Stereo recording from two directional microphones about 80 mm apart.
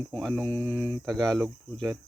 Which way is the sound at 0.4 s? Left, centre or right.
Centre.